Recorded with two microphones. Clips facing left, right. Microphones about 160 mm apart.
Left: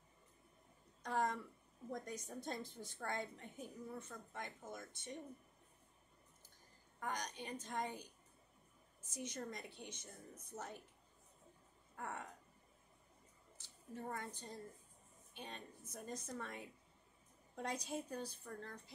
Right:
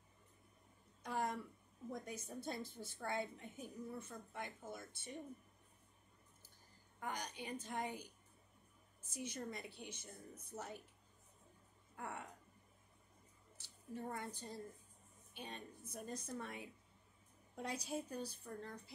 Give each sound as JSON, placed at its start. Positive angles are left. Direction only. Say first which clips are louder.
{"t": 1.0, "sound": "a sound", "louder": "left 2 dB", "side_deg": -5}
{"t": 1.9, "sound": "a woman's voice", "louder": "left 1 dB", "side_deg": -5}
{"t": 7.0, "sound": "a woman's voice", "louder": "left 1 dB", "side_deg": -10}
{"t": 9.1, "sound": "a woman's voice", "louder": "even", "side_deg": -10}
{"t": 13.6, "sound": "a woman's voice", "louder": "right 2 dB", "side_deg": -10}